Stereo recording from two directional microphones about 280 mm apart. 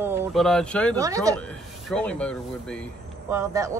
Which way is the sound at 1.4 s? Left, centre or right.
Centre.